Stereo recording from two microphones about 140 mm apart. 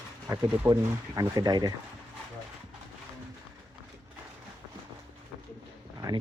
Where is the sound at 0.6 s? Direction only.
20° right (ahead or behind).